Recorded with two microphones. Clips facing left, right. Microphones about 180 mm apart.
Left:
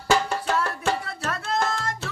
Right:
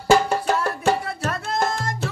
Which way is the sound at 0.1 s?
40° right (ahead or behind).